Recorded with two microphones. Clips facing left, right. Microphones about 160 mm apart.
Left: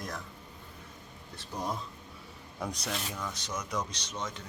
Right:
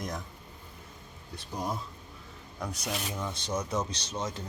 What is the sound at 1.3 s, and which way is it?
Speech, 10° right (ahead or behind).